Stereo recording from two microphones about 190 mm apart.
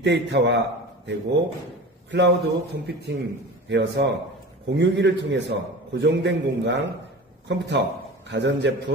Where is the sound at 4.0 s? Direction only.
65° right (ahead or behind).